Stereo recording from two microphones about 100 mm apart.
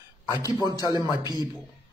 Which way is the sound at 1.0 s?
45° left (ahead or behind).